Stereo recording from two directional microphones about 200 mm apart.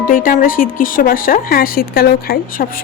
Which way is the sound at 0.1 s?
45° left (ahead or behind).